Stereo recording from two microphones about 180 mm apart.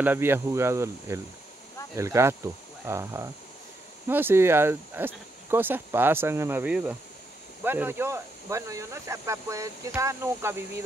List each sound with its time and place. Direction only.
0.0 s speech: 10° right (ahead or behind)